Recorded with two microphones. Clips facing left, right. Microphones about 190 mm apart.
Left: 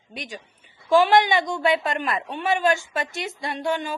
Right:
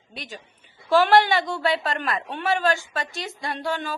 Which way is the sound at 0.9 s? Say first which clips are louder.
Even; 15° left (ahead or behind).